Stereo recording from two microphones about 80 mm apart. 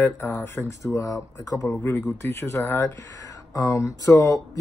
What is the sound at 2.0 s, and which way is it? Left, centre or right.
Speech, left.